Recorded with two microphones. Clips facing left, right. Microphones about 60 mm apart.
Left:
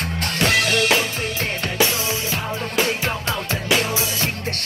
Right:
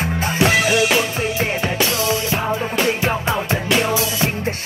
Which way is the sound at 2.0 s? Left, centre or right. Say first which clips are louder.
Right 5 dB; left.